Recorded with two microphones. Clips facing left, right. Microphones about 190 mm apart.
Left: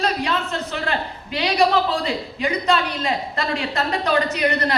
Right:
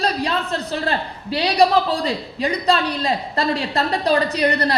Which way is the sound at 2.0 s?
35° right (ahead or behind).